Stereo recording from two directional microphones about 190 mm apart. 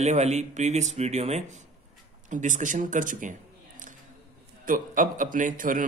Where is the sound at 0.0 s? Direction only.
35° right (ahead or behind).